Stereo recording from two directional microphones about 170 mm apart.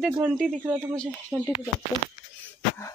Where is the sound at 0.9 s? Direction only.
5° left (ahead or behind).